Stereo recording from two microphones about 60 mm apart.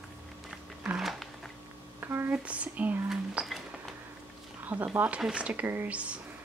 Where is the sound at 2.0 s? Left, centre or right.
Right.